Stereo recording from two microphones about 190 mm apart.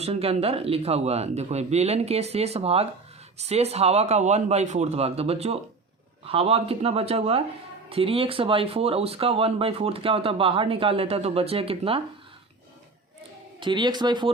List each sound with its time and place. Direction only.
0.0 s speech: 30° right (ahead or behind)
13.6 s speech: 25° right (ahead or behind)